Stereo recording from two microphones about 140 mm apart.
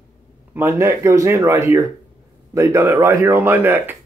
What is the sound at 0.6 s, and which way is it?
Speech, 15° right (ahead or behind).